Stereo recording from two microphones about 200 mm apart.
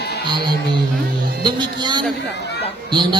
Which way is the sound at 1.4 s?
20° right (ahead or behind).